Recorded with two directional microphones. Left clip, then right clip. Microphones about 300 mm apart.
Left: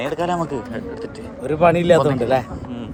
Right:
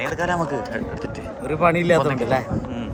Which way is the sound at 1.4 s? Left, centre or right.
Left.